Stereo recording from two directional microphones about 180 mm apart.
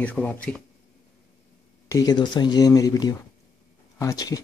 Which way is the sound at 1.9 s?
20° left (ahead or behind).